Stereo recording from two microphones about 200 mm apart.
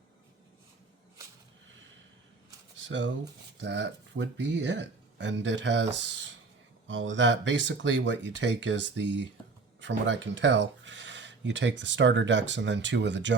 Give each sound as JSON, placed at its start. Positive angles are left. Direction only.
{"t": 2.8, "sound": "speech", "side_deg": -65}